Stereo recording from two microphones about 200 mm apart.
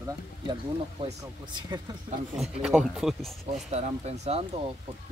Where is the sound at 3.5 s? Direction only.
35° right (ahead or behind).